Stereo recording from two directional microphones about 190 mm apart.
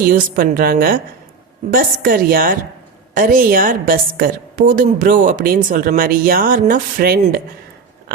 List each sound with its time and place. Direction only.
0.0 s a woman's voice: 50° right (ahead or behind)